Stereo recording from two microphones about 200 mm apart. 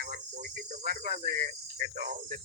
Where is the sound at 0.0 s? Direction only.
45° right (ahead or behind).